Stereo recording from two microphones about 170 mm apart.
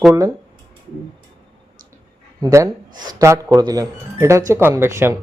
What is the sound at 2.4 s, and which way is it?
A man's voice, 20° right (ahead or behind).